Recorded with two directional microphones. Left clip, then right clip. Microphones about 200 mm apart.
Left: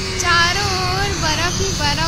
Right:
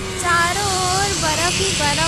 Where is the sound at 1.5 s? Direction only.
20° right (ahead or behind).